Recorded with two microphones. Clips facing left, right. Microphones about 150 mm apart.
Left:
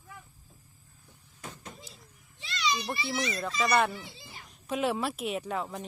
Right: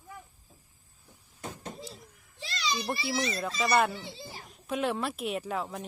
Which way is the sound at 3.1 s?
35° right (ahead or behind).